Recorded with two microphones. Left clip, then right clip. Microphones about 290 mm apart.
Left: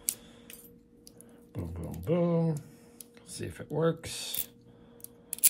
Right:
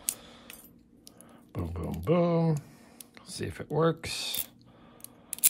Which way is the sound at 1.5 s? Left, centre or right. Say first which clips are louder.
Right 4 dB; right.